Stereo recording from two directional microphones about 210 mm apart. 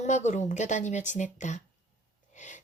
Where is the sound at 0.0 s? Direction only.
35° left (ahead or behind).